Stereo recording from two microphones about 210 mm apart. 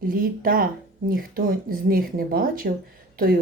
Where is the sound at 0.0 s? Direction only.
45° right (ahead or behind).